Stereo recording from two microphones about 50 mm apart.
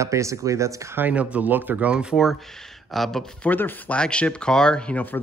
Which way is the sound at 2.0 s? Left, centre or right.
Centre.